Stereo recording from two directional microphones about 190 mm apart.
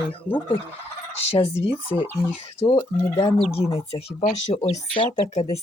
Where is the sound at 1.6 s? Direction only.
30° left (ahead or behind).